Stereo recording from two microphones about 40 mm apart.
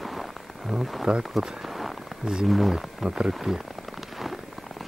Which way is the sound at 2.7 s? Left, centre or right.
Centre.